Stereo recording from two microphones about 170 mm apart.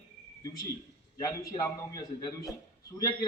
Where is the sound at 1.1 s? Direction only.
20° left (ahead or behind).